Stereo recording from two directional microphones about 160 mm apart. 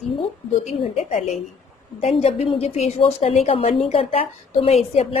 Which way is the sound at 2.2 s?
40° left (ahead or behind).